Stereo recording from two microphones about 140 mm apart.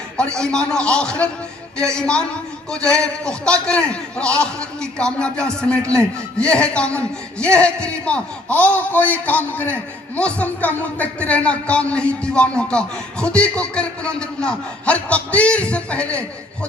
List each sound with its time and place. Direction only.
0.2 s a man's voice: 5° left (ahead or behind)
5.8 s speech: 20° right (ahead or behind)
6.4 s a man's voice: 10° left (ahead or behind)